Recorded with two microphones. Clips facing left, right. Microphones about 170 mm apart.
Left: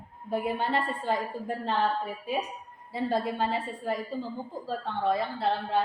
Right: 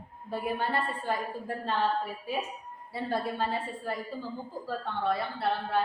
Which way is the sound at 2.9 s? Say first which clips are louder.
Left 3 dB; 20° left (ahead or behind).